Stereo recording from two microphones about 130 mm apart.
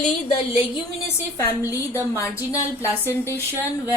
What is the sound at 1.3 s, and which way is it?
Speech, 20° left (ahead or behind).